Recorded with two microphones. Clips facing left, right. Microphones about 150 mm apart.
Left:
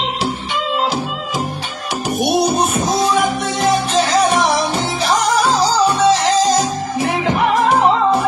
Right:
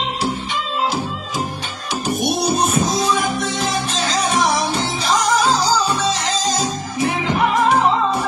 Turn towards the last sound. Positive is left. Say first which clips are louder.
# left 2 dB
turn(degrees=65)  # may be behind; listen again after turning